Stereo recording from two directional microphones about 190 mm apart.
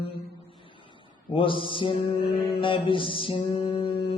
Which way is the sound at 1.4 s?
25° left (ahead or behind).